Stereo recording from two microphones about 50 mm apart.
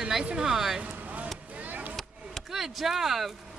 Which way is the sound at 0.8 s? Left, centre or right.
Right.